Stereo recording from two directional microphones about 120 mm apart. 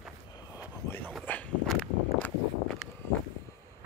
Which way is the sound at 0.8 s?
15° left (ahead or behind).